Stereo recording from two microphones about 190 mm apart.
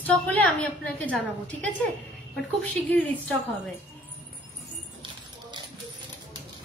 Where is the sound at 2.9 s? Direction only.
5° left (ahead or behind).